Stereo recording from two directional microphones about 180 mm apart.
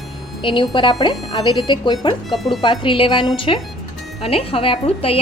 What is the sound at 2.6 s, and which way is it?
A woman's voice, 25° left (ahead or behind).